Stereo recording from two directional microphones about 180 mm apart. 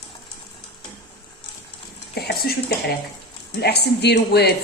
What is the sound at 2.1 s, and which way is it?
A woman's voice, 65° left (ahead or behind).